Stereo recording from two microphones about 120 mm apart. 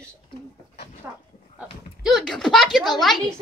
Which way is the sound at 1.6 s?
Centre (ahead or behind).